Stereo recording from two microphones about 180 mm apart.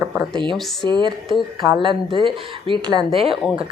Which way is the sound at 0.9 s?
25° right (ahead or behind).